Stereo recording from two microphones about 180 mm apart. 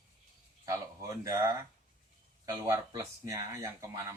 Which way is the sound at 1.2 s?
20° right (ahead or behind).